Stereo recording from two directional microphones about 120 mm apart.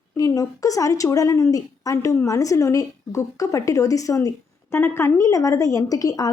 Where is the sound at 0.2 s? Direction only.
30° left (ahead or behind).